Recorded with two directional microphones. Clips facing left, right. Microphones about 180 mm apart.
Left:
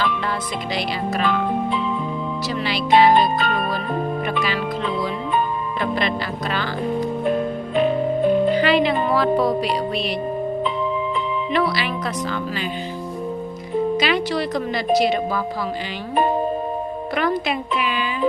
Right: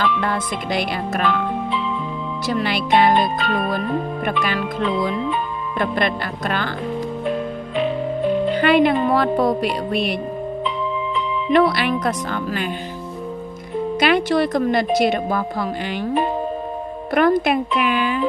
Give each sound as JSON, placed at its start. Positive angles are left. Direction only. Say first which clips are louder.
{"t": 0.2, "sound": "speech", "louder": "right 2 dB", "side_deg": -50}
{"t": 2.5, "sound": "speech", "louder": "even", "side_deg": -50}
{"t": 3.2, "sound": "music", "louder": "left 1 dB", "side_deg": 45}
{"t": 4.3, "sound": "speech", "louder": "right 1 dB", "side_deg": -50}
{"t": 7.8, "sound": "music", "louder": "left 3 dB", "side_deg": 45}
{"t": 8.6, "sound": "speech", "louder": "right 3 dB", "side_deg": -55}
{"t": 11.5, "sound": "speech", "louder": "right 7 dB", "side_deg": -55}
{"t": 13.9, "sound": "speech", "louder": "right 3 dB", "side_deg": -55}
{"t": 17.2, "sound": "speech", "louder": "right 7 dB", "side_deg": -55}